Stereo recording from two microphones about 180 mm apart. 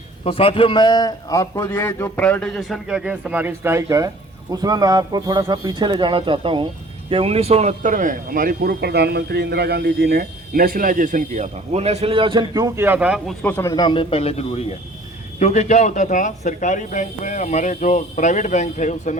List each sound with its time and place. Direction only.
0.3 s a man's voice: 30° left (ahead or behind); by 13.3 s 5° right (ahead or behind)
13.4 s speech: 10° left (ahead or behind); by 19.1 s 40° left (ahead or behind)